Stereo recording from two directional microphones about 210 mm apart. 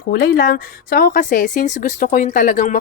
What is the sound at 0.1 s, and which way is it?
Speech, 45° left (ahead or behind).